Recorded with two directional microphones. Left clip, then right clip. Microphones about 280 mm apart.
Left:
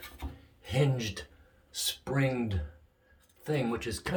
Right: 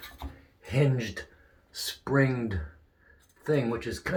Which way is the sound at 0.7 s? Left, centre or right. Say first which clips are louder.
Right 2 dB; centre.